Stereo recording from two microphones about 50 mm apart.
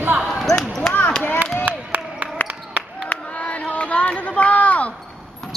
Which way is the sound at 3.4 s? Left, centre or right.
Left.